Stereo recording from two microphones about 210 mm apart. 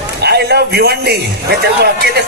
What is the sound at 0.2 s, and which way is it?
A man's voice, 50° right (ahead or behind).